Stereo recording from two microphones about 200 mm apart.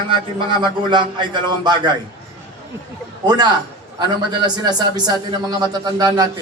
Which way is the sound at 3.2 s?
20° right (ahead or behind).